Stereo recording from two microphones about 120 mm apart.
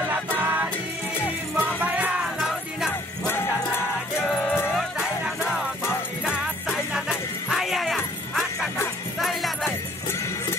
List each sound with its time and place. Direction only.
0.4 s music: 15° right (ahead or behind)
4.7 s music: 5° right (ahead or behind)